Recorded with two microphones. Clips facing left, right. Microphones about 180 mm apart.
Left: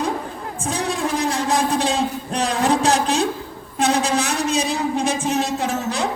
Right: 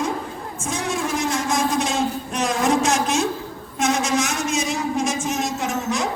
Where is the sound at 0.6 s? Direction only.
35° left (ahead or behind).